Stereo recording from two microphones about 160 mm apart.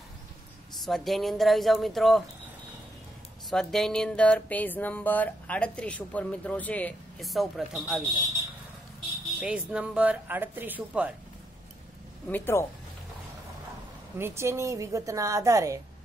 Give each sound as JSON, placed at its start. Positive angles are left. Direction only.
{"t": 0.7, "sound": "speech", "side_deg": 0}
{"t": 3.4, "sound": "music", "side_deg": 0}
{"t": 7.2, "sound": "speech", "side_deg": 0}
{"t": 9.4, "sound": "speech", "side_deg": -5}
{"t": 12.3, "sound": "music", "side_deg": 15}
{"t": 14.1, "sound": "a woman's voice", "side_deg": -15}